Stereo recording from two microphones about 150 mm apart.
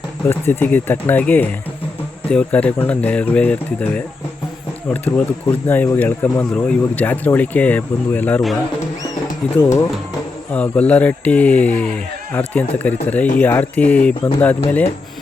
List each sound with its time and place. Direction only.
0.3 s speech: 15° left (ahead or behind)
9.6 s speech: 20° left (ahead or behind)
10.5 s speech: 10° left (ahead or behind)